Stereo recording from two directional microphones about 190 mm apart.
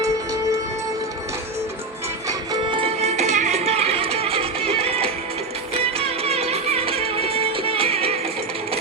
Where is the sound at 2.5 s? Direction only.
30° right (ahead or behind).